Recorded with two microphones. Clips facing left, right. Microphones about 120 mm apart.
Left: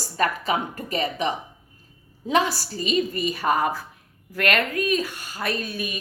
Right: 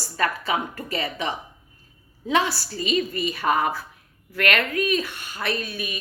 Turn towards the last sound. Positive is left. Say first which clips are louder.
# even
turn(degrees=40)  # may be behind; listen again after turning